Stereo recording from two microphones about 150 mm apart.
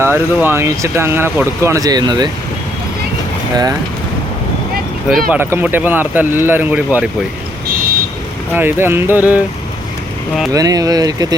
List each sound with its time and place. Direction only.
0.0 s speech: 15° right (ahead or behind)
3.5 s speech: 25° right (ahead or behind)
5.0 s speech: 5° right (ahead or behind)
8.5 s speech: 15° right (ahead or behind)
10.5 s speech: 25° right (ahead or behind)